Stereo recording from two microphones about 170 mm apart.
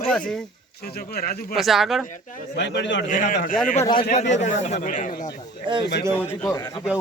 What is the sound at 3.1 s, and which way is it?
A man's voice, 50° left (ahead or behind).